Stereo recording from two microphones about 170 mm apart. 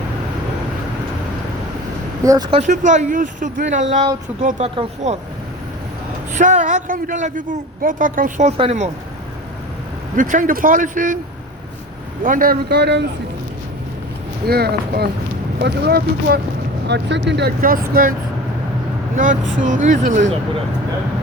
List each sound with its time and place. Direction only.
2.2 s speech: 20° right (ahead or behind)
2.5 s a woman's voice: 45° right (ahead or behind)
6.3 s a woman's voice: 45° right (ahead or behind)
10.2 s a woman's voice: 50° right (ahead or behind)
12.2 s a man's voice: 55° right (ahead or behind); by 13.1 s 80° right
14.4 s a man's voice: 70° right (ahead or behind)
16.8 s speech: 90° right
17.6 s speech: 55° right (ahead or behind)
19.1 s a woman's voice: 50° right (ahead or behind)